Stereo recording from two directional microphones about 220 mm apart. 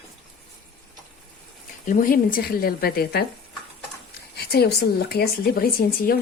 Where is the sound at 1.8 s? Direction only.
40° left (ahead or behind).